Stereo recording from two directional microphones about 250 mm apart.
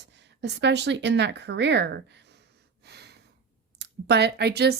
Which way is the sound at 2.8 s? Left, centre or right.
Right.